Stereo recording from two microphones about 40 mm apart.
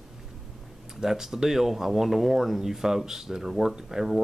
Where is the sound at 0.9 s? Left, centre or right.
Centre.